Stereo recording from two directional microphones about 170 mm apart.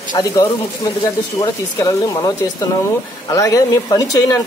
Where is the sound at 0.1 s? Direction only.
20° left (ahead or behind).